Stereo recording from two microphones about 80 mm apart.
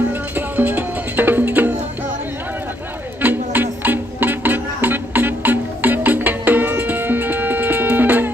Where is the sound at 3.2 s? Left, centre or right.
Right.